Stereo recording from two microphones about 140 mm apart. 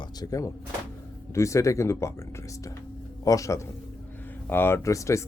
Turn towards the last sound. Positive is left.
turn(degrees=20)  # may be behind; listen again after turning